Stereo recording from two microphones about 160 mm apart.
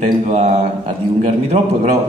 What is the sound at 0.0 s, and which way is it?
Speech, 50° right (ahead or behind).